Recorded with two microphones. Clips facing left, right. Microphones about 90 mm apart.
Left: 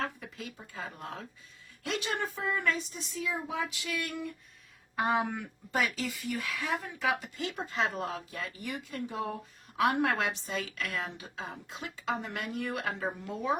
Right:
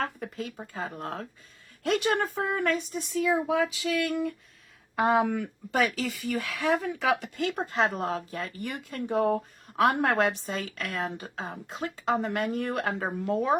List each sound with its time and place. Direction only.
0.0 s speech: 45° right (ahead or behind)
3.2 s a sound: 80° right
4.9 s speech: 90° right; by 7.6 s 60° right (ahead or behind)
7.6 s speech: 35° right (ahead or behind)
8.6 s speech: 55° right (ahead or behind)